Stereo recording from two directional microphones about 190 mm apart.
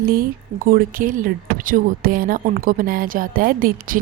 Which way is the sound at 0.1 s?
50° right (ahead or behind).